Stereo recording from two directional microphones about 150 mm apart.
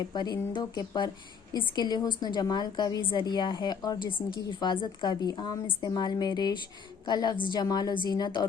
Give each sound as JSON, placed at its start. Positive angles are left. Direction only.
{"t": 0.1, "sound": "a woman's voice", "side_deg": 30}